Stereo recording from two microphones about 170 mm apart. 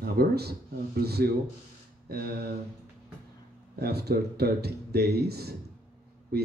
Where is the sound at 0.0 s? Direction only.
65° right (ahead or behind).